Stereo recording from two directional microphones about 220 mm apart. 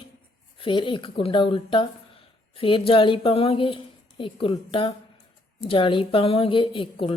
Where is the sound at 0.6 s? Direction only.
20° left (ahead or behind).